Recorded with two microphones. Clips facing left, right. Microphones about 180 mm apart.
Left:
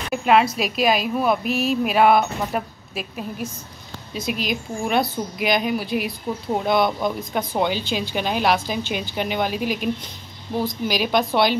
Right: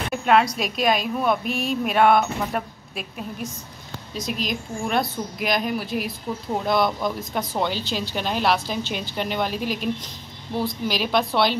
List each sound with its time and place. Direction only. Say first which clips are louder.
0.1 s speech: left 2 dB; 5° left (ahead or behind)
10.5 s a woman's voice: left 1 dB; 20° left (ahead or behind)
10.9 s speech: left 2 dB; centre (ahead or behind)